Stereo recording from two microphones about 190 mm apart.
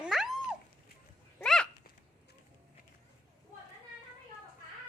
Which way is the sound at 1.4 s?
5° left (ahead or behind).